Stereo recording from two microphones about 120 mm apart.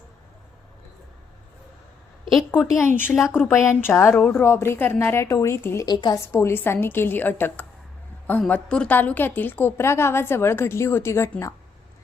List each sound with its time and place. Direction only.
2.8 s a woman's voice: 15° left (ahead or behind)
5.9 s a woman's voice: 35° left (ahead or behind)
6.1 s a woman's voice: 20° left (ahead or behind)